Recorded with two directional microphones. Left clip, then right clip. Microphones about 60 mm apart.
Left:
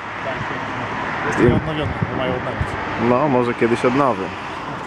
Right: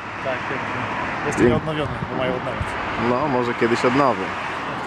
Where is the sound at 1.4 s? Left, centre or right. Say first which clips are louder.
Even; centre.